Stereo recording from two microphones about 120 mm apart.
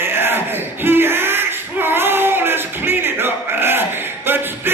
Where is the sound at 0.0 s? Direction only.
20° right (ahead or behind).